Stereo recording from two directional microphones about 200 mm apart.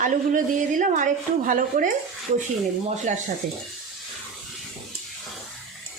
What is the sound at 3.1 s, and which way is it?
Speech, 35° right (ahead or behind).